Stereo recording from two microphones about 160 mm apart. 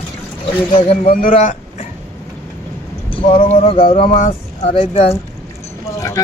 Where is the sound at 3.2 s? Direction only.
50° left (ahead or behind).